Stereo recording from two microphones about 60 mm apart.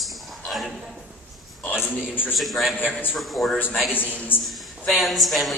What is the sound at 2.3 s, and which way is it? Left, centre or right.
A man's voice, centre.